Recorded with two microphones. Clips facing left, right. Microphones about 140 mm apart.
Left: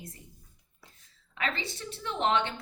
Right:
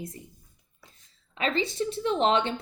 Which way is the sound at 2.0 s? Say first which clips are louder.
Right 4 dB; 20° right (ahead or behind).